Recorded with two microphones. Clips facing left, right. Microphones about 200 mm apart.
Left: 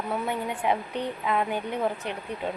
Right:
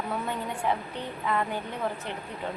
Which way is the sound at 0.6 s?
15° left (ahead or behind).